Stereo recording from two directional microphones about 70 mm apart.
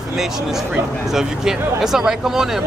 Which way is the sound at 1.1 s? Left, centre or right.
Centre.